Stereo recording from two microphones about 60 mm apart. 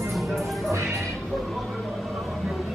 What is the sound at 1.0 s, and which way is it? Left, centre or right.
Music, centre.